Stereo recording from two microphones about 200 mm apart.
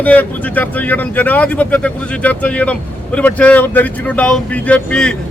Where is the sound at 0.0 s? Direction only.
5° left (ahead or behind).